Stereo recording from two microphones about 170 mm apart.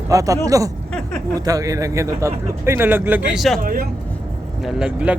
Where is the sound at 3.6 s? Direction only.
55° right (ahead or behind).